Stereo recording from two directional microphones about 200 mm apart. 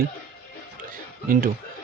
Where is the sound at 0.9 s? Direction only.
45° right (ahead or behind).